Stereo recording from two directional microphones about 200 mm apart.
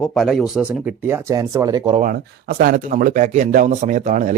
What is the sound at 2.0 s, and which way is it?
Speech, 45° right (ahead or behind).